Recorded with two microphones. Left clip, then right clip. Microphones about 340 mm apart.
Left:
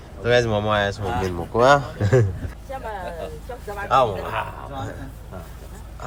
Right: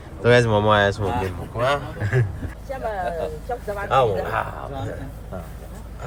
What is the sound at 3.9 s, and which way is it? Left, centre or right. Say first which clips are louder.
Speech: even; centre.